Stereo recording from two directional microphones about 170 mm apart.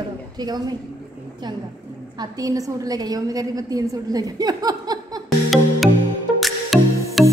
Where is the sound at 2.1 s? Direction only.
20° right (ahead or behind).